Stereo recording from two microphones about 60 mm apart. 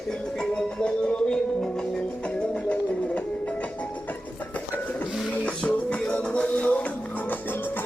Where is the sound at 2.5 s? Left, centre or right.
Left.